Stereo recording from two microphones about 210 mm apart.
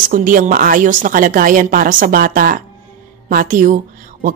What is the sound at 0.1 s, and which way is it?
A woman's voice, 40° right (ahead or behind).